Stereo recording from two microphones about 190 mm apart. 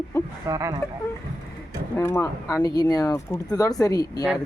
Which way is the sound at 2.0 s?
15° left (ahead or behind).